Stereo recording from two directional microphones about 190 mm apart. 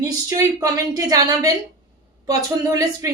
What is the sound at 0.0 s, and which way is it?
A woman's voice, 15° right (ahead or behind).